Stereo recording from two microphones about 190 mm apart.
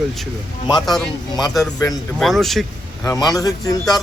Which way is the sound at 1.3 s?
20° left (ahead or behind).